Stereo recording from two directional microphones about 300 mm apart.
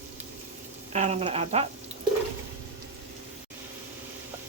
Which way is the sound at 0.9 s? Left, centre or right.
Right.